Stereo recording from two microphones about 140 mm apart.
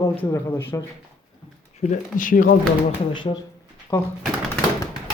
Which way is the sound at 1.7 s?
65° left (ahead or behind).